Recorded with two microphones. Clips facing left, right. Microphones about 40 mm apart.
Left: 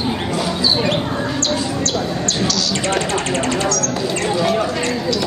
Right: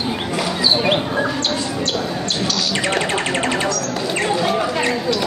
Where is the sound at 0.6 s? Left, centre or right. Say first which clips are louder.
Right 2 dB; right.